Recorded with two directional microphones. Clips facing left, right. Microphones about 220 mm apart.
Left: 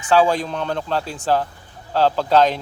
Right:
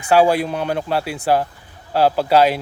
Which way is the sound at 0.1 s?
10° right (ahead or behind).